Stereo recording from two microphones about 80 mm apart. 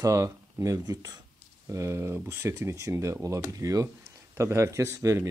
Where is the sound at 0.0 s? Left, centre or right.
Right.